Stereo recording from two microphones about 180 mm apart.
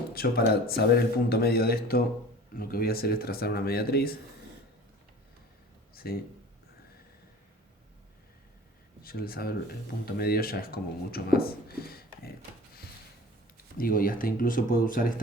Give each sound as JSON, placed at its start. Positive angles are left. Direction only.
{"t": 0.1, "sound": "speech", "side_deg": 55}
{"t": 5.9, "sound": "a sound", "side_deg": 55}
{"t": 9.0, "sound": "speech", "side_deg": 55}
{"t": 13.7, "sound": "speech", "side_deg": 55}